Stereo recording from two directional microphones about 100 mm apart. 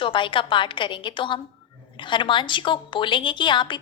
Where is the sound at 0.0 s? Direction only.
55° left (ahead or behind).